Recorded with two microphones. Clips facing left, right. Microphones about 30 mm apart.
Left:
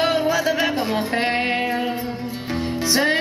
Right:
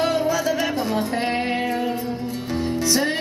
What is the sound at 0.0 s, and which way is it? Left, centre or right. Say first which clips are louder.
Music: left 2 dB; left.